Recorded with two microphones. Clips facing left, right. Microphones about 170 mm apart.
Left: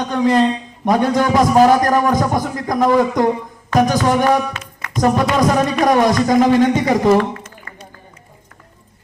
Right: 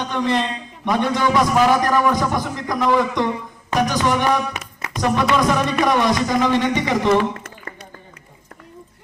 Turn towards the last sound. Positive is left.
turn(degrees=45)  # may be behind; listen again after turning